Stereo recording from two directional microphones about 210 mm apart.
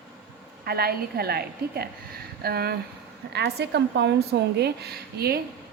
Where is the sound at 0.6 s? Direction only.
45° right (ahead or behind).